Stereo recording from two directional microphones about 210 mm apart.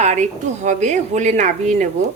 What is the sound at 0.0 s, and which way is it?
Speech, 35° right (ahead or behind).